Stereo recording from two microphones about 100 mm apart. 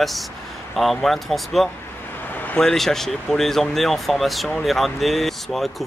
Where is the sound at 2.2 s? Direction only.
20° left (ahead or behind).